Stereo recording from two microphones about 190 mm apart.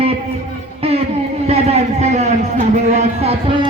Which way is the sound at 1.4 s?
35° right (ahead or behind).